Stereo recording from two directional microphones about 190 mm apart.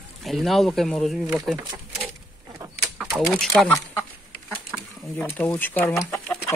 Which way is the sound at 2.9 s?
5° right (ahead or behind).